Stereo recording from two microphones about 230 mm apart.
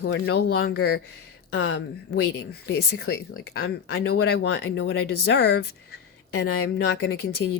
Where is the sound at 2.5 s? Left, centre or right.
Left.